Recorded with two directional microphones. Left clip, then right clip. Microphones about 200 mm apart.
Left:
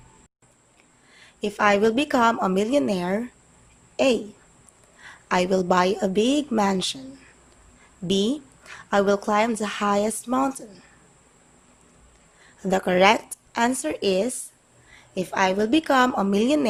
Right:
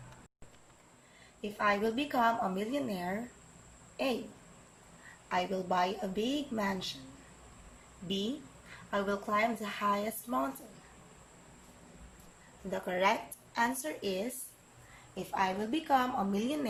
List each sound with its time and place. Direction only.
1.4 s a woman's voice: 55° left (ahead or behind)
5.3 s a woman's voice: 55° left (ahead or behind)
8.0 s a woman's voice: 55° left (ahead or behind)
12.7 s a woman's voice: 55° left (ahead or behind)